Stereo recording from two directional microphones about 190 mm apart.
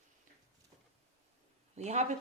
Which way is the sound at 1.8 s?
35° right (ahead or behind).